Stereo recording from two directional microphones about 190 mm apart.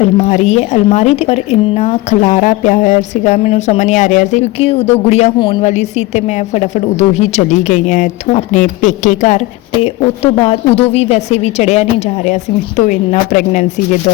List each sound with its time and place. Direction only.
0.0 s speech: 40° left (ahead or behind)
10.4 s speech: 30° left (ahead or behind)